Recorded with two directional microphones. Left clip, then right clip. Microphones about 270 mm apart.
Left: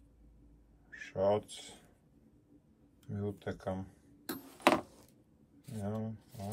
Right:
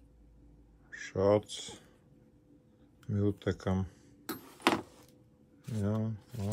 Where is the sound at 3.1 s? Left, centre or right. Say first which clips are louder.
Right 8 dB; right.